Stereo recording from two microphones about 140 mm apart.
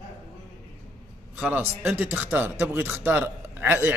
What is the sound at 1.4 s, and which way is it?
A man's voice, 10° right (ahead or behind).